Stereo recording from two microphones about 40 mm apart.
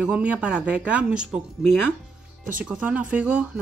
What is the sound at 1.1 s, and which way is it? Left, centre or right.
Speech, right.